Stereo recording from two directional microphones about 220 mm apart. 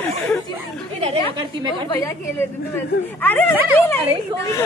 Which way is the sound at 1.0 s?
25° right (ahead or behind).